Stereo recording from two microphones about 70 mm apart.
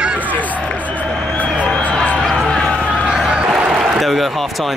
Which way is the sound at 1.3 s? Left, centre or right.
Left.